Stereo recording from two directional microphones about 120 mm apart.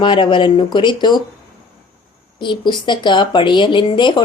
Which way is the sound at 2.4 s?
40° left (ahead or behind).